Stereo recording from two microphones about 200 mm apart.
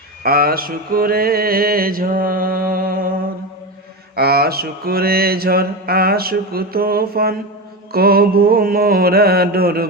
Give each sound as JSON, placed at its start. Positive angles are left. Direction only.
{"t": 0.2, "sound": "mantra", "side_deg": -50}
{"t": 4.1, "sound": "mantra", "side_deg": -50}